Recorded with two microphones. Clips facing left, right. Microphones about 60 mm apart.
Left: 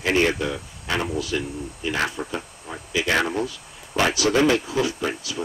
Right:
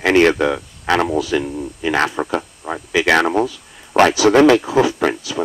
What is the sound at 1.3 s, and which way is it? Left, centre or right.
Speech, right.